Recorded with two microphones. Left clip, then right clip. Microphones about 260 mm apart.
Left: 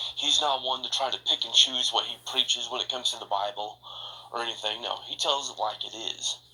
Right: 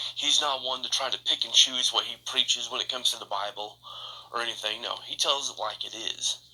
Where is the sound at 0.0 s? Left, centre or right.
Right.